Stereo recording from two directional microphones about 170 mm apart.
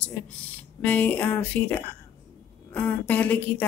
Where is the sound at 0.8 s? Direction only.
10° left (ahead or behind).